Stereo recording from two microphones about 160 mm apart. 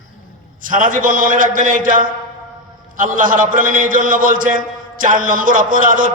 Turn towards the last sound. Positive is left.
turn(degrees=-60)  # may be behind; listen again after turning